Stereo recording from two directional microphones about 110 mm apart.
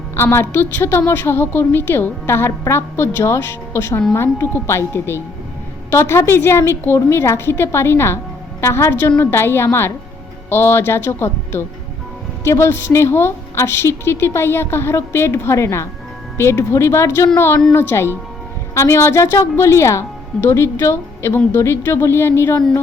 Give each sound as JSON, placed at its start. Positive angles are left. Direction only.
{"t": 0.2, "sound": "a woman's voice", "side_deg": 20}